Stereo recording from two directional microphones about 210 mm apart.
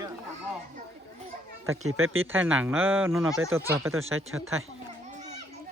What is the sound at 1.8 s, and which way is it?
Speech, 80° right.